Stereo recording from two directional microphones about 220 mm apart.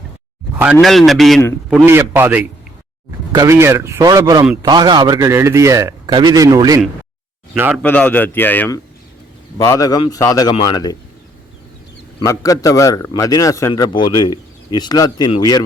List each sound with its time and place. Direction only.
0.6 s a man's voice: 5° right (ahead or behind)
1.7 s a man's voice: 10° right (ahead or behind)
7.8 s a man's voice: 5° left (ahead or behind)
12.2 s a man's voice: 15° left (ahead or behind)